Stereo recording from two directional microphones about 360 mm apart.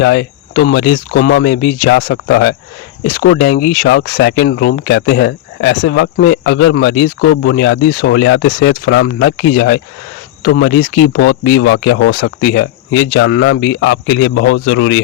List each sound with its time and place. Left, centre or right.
0.0 s speech: left